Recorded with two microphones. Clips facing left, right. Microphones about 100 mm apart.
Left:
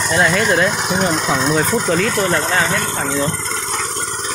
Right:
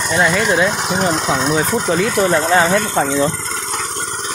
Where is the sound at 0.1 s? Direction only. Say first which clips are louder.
Even; 5° right (ahead or behind).